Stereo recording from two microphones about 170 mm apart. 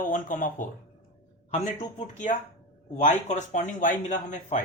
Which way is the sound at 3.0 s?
45° left (ahead or behind).